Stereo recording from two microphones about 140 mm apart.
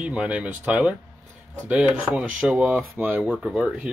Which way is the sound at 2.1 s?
5° right (ahead or behind).